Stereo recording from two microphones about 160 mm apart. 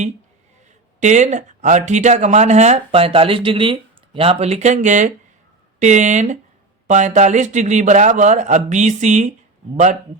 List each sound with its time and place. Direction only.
0.9 s speech: 50° right (ahead or behind)